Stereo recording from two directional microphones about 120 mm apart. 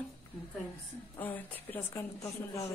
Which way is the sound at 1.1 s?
15° left (ahead or behind).